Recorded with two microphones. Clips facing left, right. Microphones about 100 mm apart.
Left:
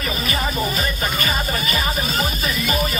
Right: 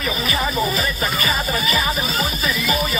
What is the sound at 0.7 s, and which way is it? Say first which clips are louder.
Music: right 1 dB; 40° left (ahead or behind).